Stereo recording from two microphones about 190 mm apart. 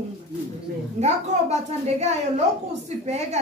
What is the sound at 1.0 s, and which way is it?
Speech, 35° right (ahead or behind).